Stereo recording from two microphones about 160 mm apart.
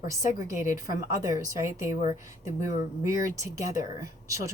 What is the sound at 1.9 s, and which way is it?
Speech, 55° left (ahead or behind).